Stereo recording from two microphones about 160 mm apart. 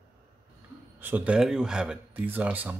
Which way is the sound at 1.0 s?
10° right (ahead or behind).